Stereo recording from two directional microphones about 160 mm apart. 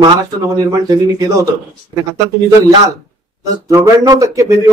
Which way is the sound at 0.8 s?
20° right (ahead or behind).